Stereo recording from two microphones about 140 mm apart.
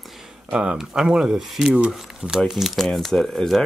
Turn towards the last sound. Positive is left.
turn(degrees=0)  # may be behind; listen again after turning